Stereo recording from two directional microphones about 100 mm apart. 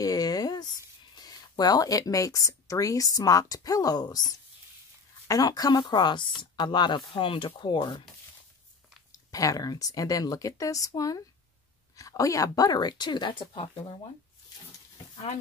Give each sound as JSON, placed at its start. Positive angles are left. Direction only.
{"t": 0.0, "sound": "a sound", "side_deg": 40}
{"t": 1.1, "sound": "speech", "side_deg": 40}
{"t": 9.3, "sound": "speech", "side_deg": 35}